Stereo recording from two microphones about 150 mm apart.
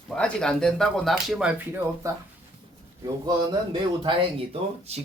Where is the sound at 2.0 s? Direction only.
20° right (ahead or behind).